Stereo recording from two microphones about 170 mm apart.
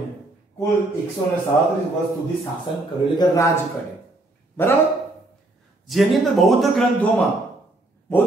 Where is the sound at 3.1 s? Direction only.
15° left (ahead or behind).